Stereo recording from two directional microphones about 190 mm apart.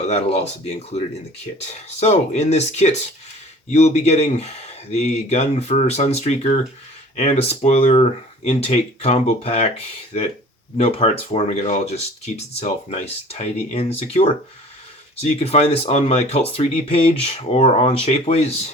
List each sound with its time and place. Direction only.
0.0 s speech: 35° left (ahead or behind)